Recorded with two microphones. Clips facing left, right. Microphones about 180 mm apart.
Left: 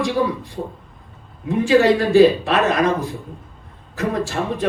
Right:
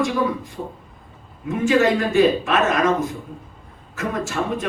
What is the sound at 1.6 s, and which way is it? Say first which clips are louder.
A man's voice: left 3 dB; 35° left (ahead or behind).